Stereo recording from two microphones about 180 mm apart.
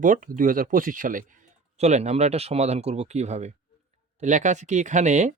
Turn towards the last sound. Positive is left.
turn(degrees=-40)  # may be behind; listen again after turning